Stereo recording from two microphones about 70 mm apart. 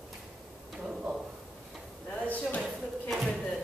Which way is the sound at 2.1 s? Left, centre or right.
Left.